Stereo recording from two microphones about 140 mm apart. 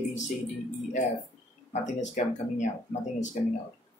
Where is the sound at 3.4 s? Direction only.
55° left (ahead or behind).